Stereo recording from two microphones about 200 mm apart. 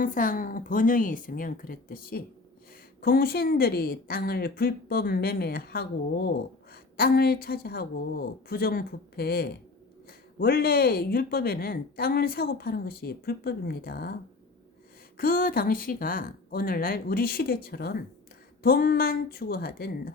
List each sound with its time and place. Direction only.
0.0 s speech: 45° left (ahead or behind)
6.9 s speech: 50° left (ahead or behind)
15.2 s speech: 45° left (ahead or behind)